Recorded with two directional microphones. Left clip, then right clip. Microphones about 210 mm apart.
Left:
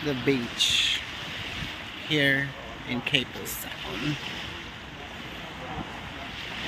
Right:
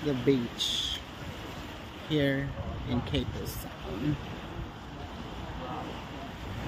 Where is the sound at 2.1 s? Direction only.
5° left (ahead or behind).